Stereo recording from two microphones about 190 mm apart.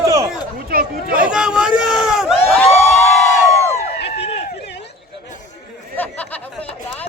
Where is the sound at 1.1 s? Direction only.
5° right (ahead or behind).